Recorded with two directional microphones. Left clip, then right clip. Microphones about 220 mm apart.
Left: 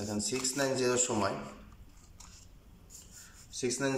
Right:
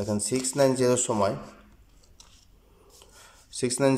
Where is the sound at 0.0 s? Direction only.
30° right (ahead or behind).